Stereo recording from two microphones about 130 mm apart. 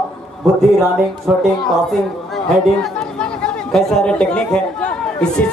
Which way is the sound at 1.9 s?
Centre (ahead or behind).